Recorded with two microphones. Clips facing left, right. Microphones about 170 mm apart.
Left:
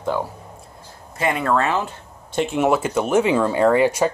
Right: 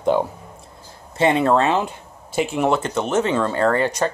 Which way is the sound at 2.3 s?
5° right (ahead or behind).